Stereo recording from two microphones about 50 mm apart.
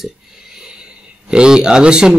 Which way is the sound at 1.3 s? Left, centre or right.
Centre.